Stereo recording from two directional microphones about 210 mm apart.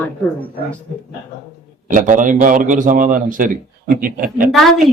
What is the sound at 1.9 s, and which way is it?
A man's voice, 40° right (ahead or behind).